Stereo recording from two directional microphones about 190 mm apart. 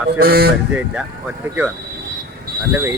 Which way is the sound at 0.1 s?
55° right (ahead or behind).